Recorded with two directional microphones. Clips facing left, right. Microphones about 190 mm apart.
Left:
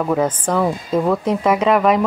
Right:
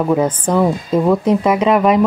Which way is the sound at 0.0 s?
10° right (ahead or behind).